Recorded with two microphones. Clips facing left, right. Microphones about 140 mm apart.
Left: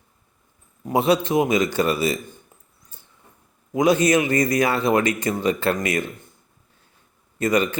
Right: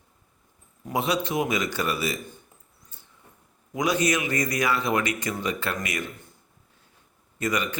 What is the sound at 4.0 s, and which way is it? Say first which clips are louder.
Speech: left 6 dB; 25° left (ahead or behind).